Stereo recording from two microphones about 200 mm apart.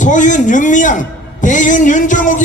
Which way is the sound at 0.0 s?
40° left (ahead or behind).